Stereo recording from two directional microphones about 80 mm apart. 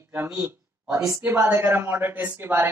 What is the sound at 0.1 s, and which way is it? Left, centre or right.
Speech, right.